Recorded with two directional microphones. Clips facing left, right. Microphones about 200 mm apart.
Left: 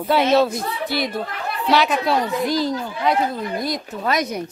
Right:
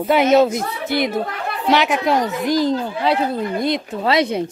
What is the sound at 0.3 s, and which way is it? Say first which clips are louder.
A woman's voice: right 3 dB; 20° right (ahead or behind).